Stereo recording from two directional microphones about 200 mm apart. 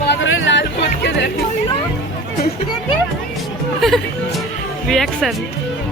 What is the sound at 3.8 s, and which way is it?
Music, centre (ahead or behind).